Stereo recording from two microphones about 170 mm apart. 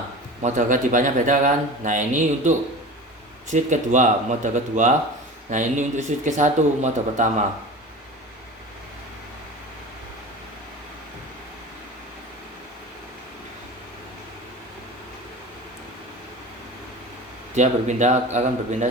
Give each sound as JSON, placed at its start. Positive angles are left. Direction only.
{"t": 0.4, "sound": "speech", "side_deg": -50}
{"t": 17.5, "sound": "speech", "side_deg": -45}